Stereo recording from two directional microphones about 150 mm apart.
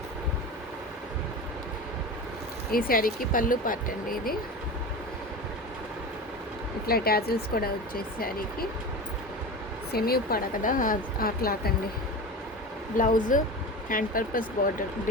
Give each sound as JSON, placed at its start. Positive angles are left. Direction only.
{"t": 2.7, "sound": "speech", "side_deg": 70}
{"t": 6.8, "sound": "speech", "side_deg": 90}
{"t": 9.9, "sound": "a woman's voice", "side_deg": 85}
{"t": 13.0, "sound": "speech", "side_deg": 60}